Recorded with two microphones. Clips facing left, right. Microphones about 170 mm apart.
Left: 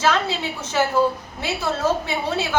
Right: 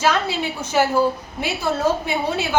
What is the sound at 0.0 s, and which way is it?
A woman's voice, 10° right (ahead or behind).